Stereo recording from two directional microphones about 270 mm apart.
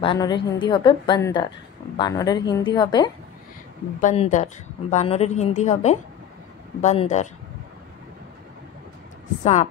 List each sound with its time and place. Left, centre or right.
0.0 s a woman's voice: centre
4.0 s a woman's voice: left
9.4 s speech: left